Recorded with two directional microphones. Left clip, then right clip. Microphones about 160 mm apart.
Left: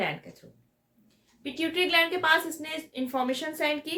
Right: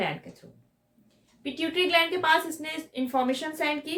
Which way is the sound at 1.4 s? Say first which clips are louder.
Right 1 dB; centre (ahead or behind).